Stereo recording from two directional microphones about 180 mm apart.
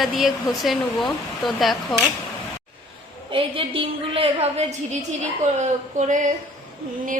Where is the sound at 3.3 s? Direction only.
30° right (ahead or behind).